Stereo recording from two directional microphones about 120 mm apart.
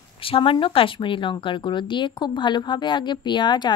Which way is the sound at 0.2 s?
50° left (ahead or behind).